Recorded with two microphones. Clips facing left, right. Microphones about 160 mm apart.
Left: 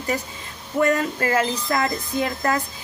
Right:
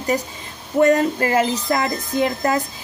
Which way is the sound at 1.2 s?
20° right (ahead or behind).